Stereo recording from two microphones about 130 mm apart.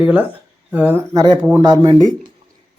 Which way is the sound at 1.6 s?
35° right (ahead or behind).